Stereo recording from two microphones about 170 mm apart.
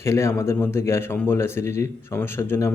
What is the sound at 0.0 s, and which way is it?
Speech, 15° left (ahead or behind).